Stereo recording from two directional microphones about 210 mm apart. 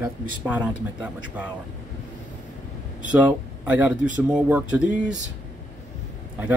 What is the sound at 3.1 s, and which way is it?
Speech, 5° right (ahead or behind).